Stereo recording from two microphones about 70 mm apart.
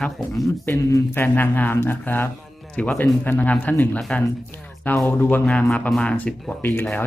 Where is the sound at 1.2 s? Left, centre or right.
Left.